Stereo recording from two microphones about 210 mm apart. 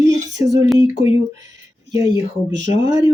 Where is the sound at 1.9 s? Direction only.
15° right (ahead or behind).